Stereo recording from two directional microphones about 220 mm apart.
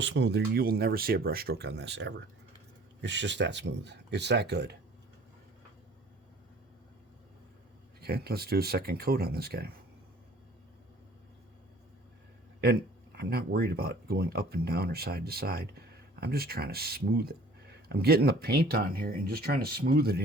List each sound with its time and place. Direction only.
0.0 s speech: 55° right (ahead or behind)
8.0 s speech: 45° right (ahead or behind)
13.1 s speech: 45° right (ahead or behind)